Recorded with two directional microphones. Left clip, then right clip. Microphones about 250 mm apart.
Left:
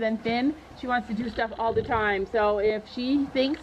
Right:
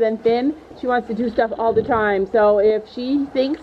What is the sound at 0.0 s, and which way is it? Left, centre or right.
Speech, right.